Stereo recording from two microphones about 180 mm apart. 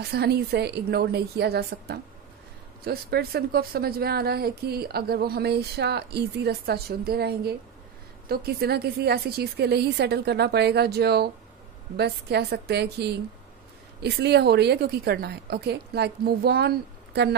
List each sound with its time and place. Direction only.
0.0 s speech: 60° right (ahead or behind)